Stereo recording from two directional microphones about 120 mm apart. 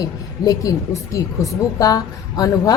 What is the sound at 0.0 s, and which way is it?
A woman's voice, 30° left (ahead or behind).